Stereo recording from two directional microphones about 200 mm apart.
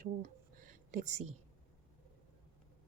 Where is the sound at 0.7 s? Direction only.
40° right (ahead or behind).